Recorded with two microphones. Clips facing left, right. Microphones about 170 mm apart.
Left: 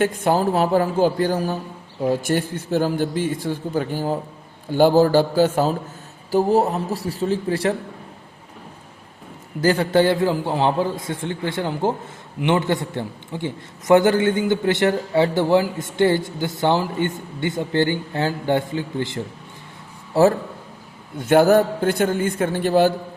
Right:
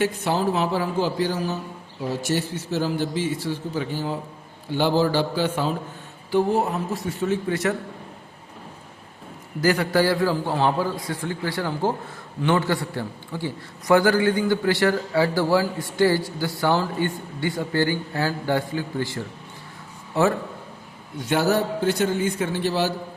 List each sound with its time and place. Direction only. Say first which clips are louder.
0.0 s a man's voice: left 4 dB; 50° left (ahead or behind); by 7.8 s 30° left (ahead or behind)
9.6 s a man's voice: left 3 dB; 30° left (ahead or behind)
20.1 s a man's voice: left 5 dB; 35° left (ahead or behind)
21.2 s a man's voice: left 7 dB; 55° left (ahead or behind)